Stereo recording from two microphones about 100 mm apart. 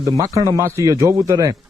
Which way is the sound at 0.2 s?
35° right (ahead or behind).